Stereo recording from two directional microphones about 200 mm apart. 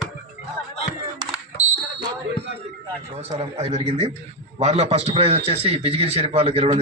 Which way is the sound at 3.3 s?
30° right (ahead or behind).